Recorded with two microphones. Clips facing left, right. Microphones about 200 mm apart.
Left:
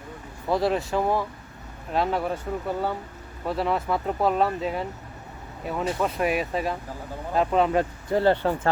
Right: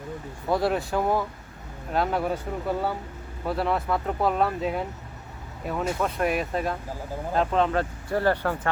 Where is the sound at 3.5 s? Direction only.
Centre (ahead or behind).